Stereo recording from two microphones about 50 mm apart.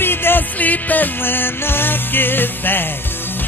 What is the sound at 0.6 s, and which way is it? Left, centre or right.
Music, left.